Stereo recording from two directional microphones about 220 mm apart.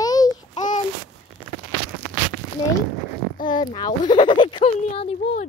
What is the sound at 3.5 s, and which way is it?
Speech, 25° left (ahead or behind).